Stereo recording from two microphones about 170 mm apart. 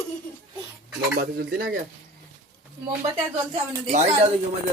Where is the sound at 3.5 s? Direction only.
45° right (ahead or behind).